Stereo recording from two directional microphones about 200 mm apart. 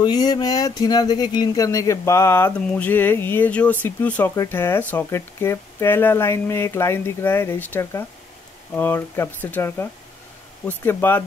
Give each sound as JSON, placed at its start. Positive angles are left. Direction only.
{"t": 0.0, "sound": "speech", "side_deg": 20}